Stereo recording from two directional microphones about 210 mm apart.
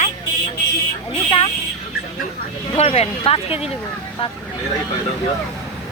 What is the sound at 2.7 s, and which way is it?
Speech, 30° left (ahead or behind).